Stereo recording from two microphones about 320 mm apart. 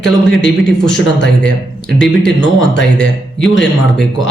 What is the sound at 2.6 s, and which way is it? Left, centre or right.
Speech, left.